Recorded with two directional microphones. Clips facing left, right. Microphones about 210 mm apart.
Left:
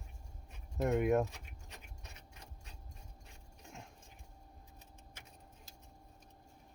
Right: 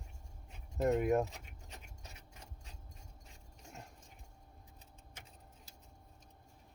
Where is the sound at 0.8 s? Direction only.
Centre (ahead or behind).